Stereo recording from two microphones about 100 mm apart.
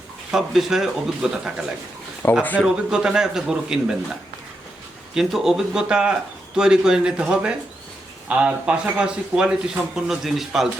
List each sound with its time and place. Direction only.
0.3 s speech: 5° right (ahead or behind)
2.2 s speech: 20° left (ahead or behind)
2.6 s a man's voice: 5° right (ahead or behind)